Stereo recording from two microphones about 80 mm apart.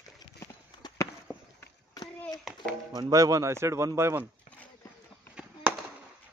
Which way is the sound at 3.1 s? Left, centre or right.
Right.